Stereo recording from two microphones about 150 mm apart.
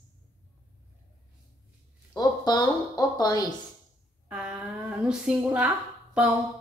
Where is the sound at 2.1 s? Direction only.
25° left (ahead or behind).